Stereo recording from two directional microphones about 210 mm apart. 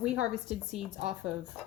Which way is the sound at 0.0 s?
5° right (ahead or behind).